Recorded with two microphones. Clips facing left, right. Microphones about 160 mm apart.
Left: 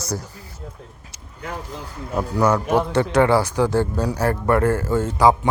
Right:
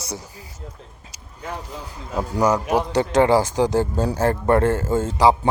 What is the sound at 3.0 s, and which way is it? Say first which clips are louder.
Speech: right 2 dB; 20° right (ahead or behind).